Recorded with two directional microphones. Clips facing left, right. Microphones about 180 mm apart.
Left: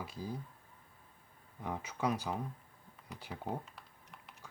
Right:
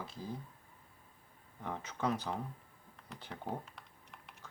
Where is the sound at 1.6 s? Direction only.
10° left (ahead or behind).